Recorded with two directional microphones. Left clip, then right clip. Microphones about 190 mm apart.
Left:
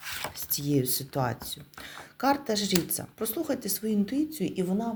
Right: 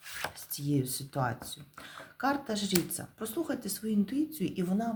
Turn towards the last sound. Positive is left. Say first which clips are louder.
# left 3 dB
turn(degrees=5)  # may be behind; listen again after turning